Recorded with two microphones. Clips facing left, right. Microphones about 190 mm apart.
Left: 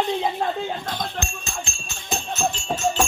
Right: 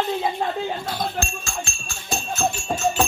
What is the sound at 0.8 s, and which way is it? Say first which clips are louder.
Speech: right 2 dB; 10° right (ahead or behind).